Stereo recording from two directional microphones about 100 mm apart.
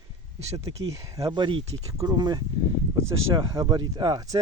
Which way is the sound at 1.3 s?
55° right (ahead or behind).